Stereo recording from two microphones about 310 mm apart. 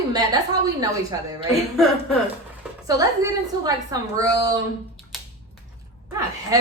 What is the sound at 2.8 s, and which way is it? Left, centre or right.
A woman's voice, centre.